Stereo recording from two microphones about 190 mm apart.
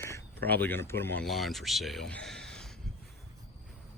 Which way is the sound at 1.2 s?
Centre (ahead or behind).